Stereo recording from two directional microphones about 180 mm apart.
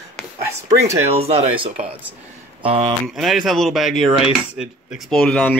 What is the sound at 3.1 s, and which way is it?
Speech, centre (ahead or behind).